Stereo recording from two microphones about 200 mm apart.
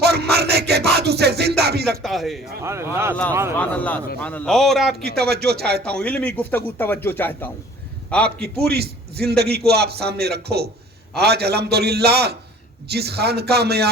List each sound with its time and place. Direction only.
0.0 s music: 55° right (ahead or behind)
2.0 s a man's voice: centre (ahead or behind)
2.6 s speech: 15° right (ahead or behind)
3.6 s a man's voice: 5° left (ahead or behind)
5.0 s a man's voice: 55° right (ahead or behind)
6.0 s speech: 5° left (ahead or behind)
8.6 s a man's voice: 55° right (ahead or behind)